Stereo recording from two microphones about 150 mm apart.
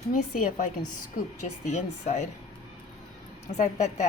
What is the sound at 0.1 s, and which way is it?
Speech, 60° left (ahead or behind).